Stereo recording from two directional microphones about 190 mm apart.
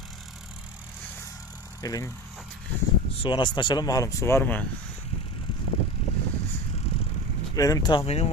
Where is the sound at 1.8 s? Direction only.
20° left (ahead or behind).